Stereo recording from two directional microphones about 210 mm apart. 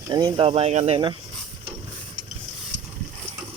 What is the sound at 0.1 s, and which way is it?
Speech, 20° right (ahead or behind).